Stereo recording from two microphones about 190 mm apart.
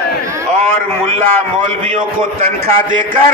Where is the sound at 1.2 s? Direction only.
25° right (ahead or behind).